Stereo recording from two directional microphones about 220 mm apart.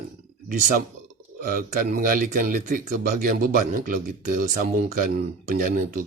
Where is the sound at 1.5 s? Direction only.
40° right (ahead or behind).